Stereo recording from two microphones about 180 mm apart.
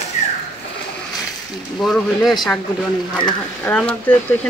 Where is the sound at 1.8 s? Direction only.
Centre (ahead or behind).